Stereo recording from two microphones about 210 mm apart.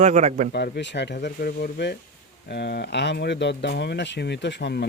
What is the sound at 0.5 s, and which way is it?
Speech, 55° left (ahead or behind).